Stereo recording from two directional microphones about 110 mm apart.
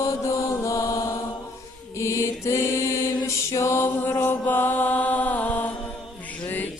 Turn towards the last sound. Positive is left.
turn(degrees=15)  # may be behind; listen again after turning